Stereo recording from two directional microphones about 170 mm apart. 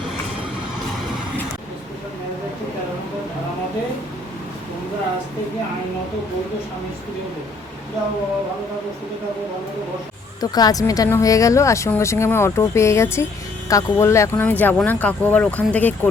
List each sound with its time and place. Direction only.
10.4 s speech: 25° left (ahead or behind)